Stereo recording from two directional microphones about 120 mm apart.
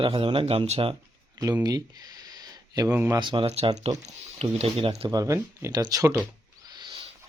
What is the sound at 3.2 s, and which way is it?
Speech, 45° right (ahead or behind).